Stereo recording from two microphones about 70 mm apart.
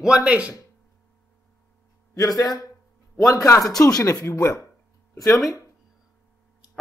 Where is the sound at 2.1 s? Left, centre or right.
Left.